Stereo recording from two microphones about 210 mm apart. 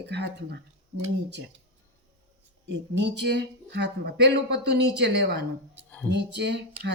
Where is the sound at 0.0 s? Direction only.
55° right (ahead or behind).